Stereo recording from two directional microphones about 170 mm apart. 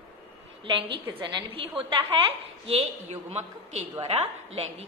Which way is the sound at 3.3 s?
40° right (ahead or behind).